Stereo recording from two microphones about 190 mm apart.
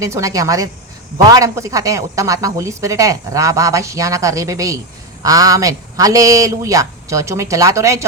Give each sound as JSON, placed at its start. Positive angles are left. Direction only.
{"t": 0.0, "sound": "speech", "side_deg": -15}